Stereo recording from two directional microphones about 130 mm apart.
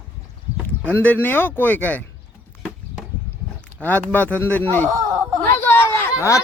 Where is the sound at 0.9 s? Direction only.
15° left (ahead or behind).